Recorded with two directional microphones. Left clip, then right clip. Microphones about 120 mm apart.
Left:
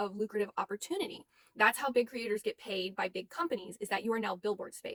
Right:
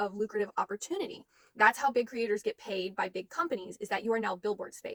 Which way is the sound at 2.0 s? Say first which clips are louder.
Right 3 dB; 20° left (ahead or behind).